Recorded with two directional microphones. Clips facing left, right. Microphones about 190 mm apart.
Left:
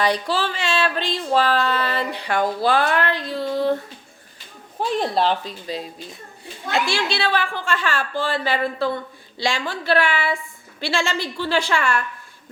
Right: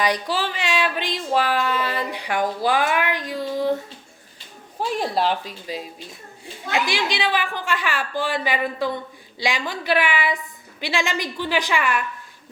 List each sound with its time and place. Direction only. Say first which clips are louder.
0.0 s speech: left 2 dB; 15° right (ahead or behind)
4.9 s speech: left 2 dB; 10° right (ahead or behind)